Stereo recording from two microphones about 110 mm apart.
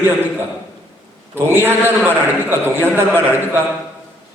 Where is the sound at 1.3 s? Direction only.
20° right (ahead or behind).